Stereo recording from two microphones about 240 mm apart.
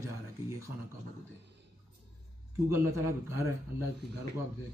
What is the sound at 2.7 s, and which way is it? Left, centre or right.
Speech, centre.